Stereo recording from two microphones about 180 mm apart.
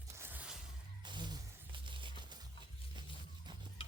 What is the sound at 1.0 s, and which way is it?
Music, 25° right (ahead or behind).